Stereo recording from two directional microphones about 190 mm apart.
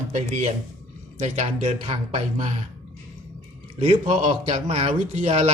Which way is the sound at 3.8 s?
40° right (ahead or behind).